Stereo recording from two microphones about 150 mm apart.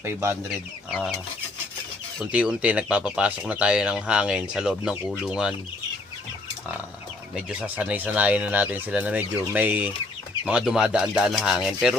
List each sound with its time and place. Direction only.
0.0 s speech: 15° right (ahead or behind)
0.9 s speech: centre (ahead or behind)
2.3 s speech: 5° right (ahead or behind)
7.6 s speech: 10° right (ahead or behind)